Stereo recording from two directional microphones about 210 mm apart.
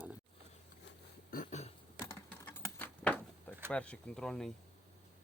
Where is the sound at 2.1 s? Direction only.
10° left (ahead or behind).